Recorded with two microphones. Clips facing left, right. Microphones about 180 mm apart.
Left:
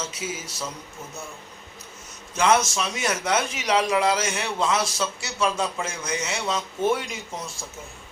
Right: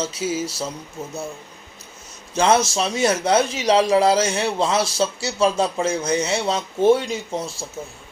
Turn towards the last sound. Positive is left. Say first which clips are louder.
# right 8 dB
turn(degrees=-30)  # may be behind; listen again after turning